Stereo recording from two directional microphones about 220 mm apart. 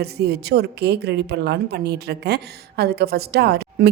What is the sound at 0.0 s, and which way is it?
A woman's voice, 45° right (ahead or behind).